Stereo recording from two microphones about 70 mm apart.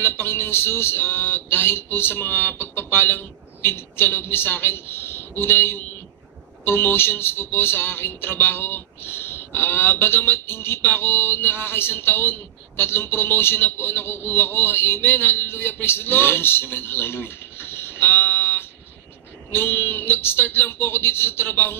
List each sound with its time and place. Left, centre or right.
0.0 s speech: left